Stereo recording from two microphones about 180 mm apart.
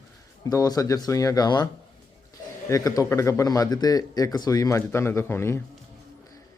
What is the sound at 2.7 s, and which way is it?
Speech, 20° left (ahead or behind).